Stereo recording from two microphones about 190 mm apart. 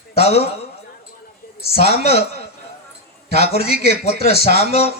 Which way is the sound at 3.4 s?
35° left (ahead or behind).